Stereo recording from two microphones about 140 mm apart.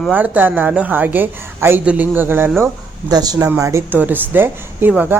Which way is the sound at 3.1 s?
30° right (ahead or behind).